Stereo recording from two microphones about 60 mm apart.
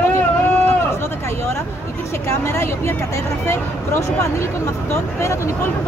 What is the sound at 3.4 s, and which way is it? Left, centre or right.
Speech, left.